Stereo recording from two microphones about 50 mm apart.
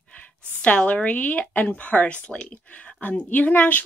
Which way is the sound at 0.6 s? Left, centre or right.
Left.